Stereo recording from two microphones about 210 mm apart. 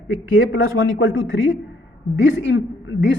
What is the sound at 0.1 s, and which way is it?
A man's voice, 70° left (ahead or behind).